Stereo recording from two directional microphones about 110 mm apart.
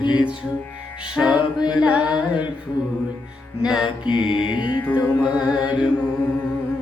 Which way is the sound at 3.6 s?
5° right (ahead or behind).